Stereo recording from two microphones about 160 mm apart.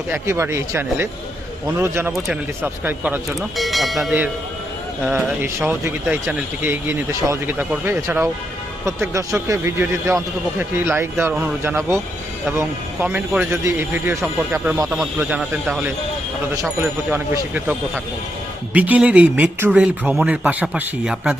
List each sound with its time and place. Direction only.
0.1 s speech: 15° right (ahead or behind)
2.1 s speech: centre (ahead or behind)
2.6 s speech: 10° right (ahead or behind)
3.2 s speech: centre (ahead or behind)